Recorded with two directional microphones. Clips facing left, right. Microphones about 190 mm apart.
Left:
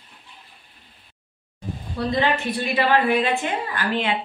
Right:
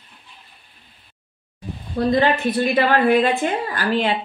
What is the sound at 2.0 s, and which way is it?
A woman's voice, 50° right (ahead or behind).